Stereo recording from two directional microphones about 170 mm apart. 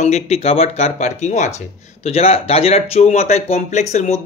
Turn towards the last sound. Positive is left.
turn(degrees=40)  # may be behind; listen again after turning